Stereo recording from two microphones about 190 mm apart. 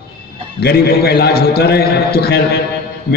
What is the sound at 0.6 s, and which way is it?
A man's voice, 55° left (ahead or behind).